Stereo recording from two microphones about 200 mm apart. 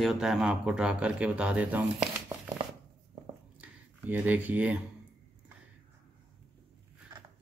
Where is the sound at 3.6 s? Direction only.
10° right (ahead or behind).